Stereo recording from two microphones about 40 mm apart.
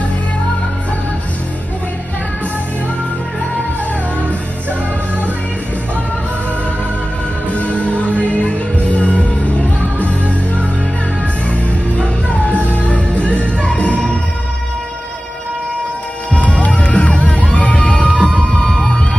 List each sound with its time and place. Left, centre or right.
7.5 s music: left
16.3 s music: left